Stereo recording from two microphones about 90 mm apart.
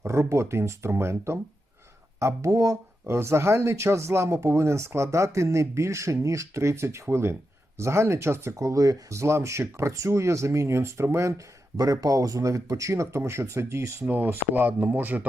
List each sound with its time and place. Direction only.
0.1 s speech: 30° right (ahead or behind)